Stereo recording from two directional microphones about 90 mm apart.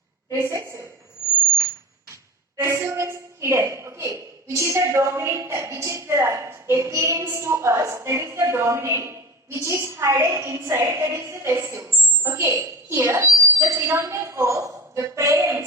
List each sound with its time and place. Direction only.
0.3 s a woman's voice: 30° right (ahead or behind)
2.6 s a woman's voice: 30° right (ahead or behind)